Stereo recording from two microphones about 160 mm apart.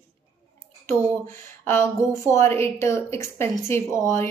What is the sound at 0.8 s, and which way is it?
A woman's voice, 15° left (ahead or behind).